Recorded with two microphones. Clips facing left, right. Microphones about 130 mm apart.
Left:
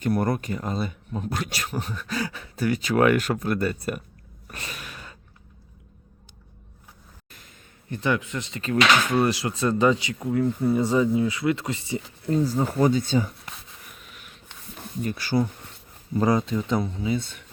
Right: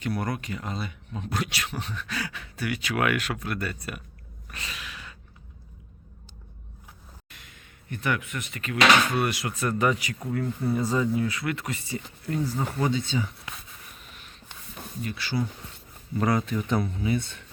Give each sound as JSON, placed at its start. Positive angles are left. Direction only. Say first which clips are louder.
{"t": 0.0, "sound": "speech", "louder": "left 6 dB", "side_deg": 45}
{"t": 4.4, "sound": "gasp", "louder": "left 2 dB", "side_deg": 45}
{"t": 7.9, "sound": "speech", "louder": "left 4 dB", "side_deg": 30}
{"t": 15.0, "sound": "speech", "louder": "left 6 dB", "side_deg": 45}
{"t": 16.1, "sound": "speech", "louder": "left 3 dB", "side_deg": 25}